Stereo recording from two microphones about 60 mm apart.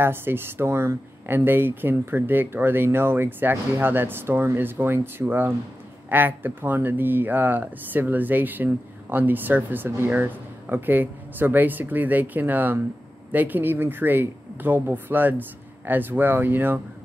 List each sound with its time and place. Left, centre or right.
0.0 s speech: right